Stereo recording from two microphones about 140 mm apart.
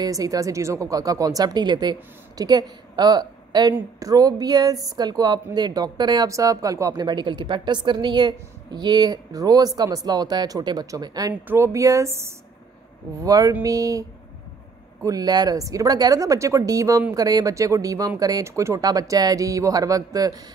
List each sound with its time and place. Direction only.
0.0 s speech: 25° right (ahead or behind)
15.0 s speech: 30° right (ahead or behind)